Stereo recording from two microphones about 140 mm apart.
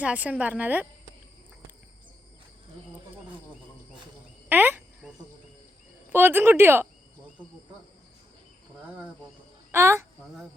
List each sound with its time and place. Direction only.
0.0 s a woman's voice: 10° right (ahead or behind)
4.4 s cricket: 15° right (ahead or behind)
6.1 s a woman's voice: 15° right (ahead or behind)
9.7 s speech: 20° right (ahead or behind)